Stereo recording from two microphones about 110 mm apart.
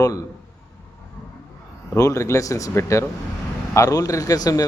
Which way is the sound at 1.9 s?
25° left (ahead or behind).